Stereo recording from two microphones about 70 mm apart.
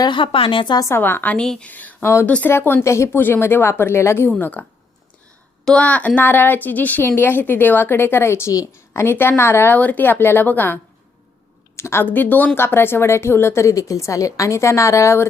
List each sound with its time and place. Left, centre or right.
0.6 s speech: left
0.9 s a woman's voice: left
1.4 s a woman's voice: centre
1.6 s speech: left
2.5 s a woman's voice: left
2.8 s a woman's voice: left
3.2 s a woman's voice: left
5.6 s a woman's voice: centre; by 9.1 s left
9.1 s a woman's voice: left
9.7 s speech: left
11.8 s a woman's voice: left
12.0 s a woman's voice: left